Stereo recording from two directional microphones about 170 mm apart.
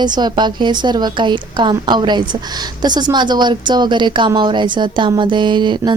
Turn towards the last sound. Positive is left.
turn(degrees=-25)  # may be behind; listen again after turning